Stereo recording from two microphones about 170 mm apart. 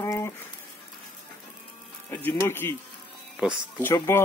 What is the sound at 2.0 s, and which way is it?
Speech, 15° left (ahead or behind).